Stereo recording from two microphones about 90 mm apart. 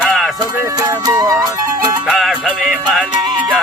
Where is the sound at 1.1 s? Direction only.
35° right (ahead or behind).